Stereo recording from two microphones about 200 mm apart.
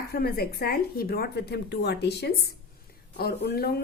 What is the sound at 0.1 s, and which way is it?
A woman's voice, 50° left (ahead or behind).